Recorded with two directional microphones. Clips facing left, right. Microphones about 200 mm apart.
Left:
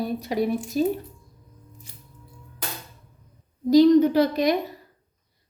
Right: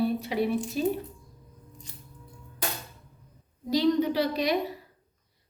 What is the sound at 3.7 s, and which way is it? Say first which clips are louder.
Speech: left 9 dB; 45° left (ahead or behind).